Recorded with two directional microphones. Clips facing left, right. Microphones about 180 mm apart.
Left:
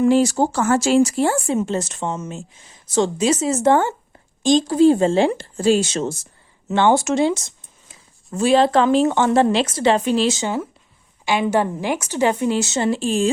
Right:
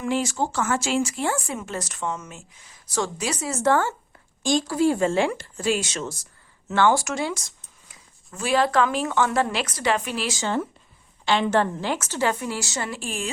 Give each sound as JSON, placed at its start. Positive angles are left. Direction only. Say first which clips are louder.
{"t": 0.0, "sound": "speech", "louder": "left 9 dB", "side_deg": 35}
{"t": 1.5, "sound": "a woman's voice", "louder": "left 10 dB", "side_deg": 25}
{"t": 11.3, "sound": "a woman's voice", "louder": "left 2 dB", "side_deg": 10}